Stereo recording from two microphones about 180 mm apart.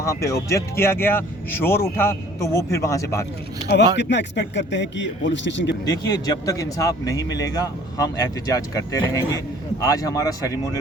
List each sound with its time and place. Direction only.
0.0 s speech: 15° left (ahead or behind)
3.9 s a man's voice: 75° left (ahead or behind)
5.8 s speech: 20° left (ahead or behind)